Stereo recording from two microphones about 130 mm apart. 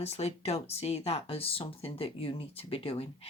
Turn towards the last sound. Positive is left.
turn(degrees=45)  # may be behind; listen again after turning